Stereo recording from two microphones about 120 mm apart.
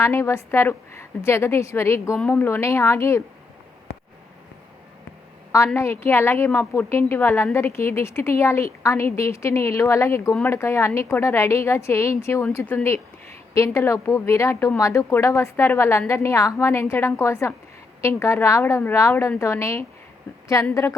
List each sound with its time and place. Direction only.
0.0 s a woman's voice: 20° left (ahead or behind)
5.5 s a woman's voice: 25° left (ahead or behind)